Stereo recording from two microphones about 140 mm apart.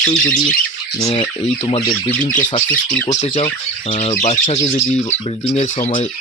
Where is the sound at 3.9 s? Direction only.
50° left (ahead or behind).